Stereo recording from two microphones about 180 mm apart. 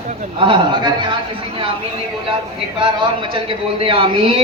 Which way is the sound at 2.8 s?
30° right (ahead or behind).